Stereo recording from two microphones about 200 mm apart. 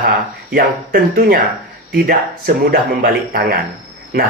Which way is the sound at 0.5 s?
50° right (ahead or behind).